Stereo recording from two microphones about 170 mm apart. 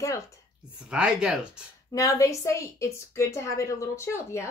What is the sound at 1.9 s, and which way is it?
A woman's voice, 20° left (ahead or behind).